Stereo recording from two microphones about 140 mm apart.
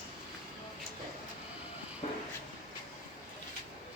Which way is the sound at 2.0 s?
50° left (ahead or behind).